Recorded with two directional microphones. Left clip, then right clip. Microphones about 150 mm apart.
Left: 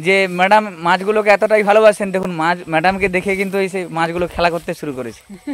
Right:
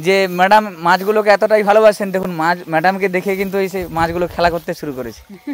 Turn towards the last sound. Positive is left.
turn(degrees=5)  # may be behind; listen again after turning